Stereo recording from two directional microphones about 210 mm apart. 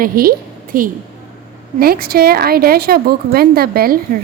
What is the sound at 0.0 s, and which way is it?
A woman's voice, 45° right (ahead or behind).